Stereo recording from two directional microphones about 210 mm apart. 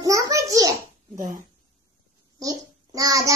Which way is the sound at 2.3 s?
15° right (ahead or behind).